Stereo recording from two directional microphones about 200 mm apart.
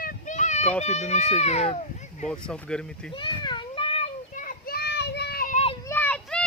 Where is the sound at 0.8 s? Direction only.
35° left (ahead or behind).